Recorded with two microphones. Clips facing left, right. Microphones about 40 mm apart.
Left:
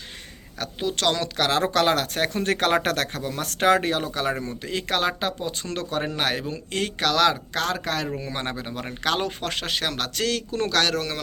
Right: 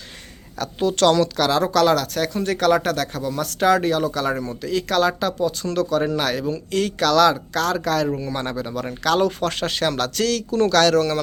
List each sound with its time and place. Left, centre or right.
0.6 s speech: centre
1.2 s speech: left
9.5 s speech: centre